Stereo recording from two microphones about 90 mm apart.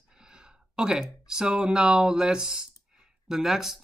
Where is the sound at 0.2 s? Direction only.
10° right (ahead or behind).